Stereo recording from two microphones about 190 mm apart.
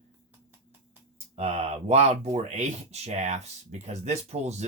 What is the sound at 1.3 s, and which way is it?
Speech, 35° right (ahead or behind).